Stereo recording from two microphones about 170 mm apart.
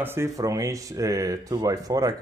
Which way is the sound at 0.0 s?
15° right (ahead or behind).